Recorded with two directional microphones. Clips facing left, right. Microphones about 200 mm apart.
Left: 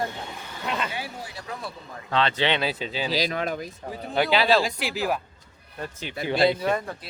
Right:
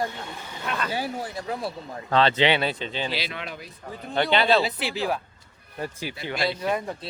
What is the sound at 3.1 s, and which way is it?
Speech, 40° left (ahead or behind).